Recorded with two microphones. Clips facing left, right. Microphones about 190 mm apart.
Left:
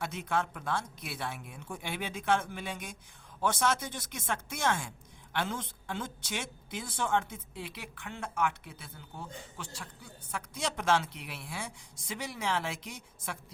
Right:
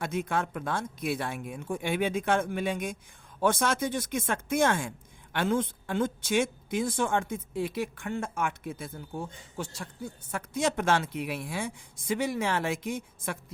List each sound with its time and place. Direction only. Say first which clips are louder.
0.0 s a woman's voice: right 3 dB; 50° right (ahead or behind)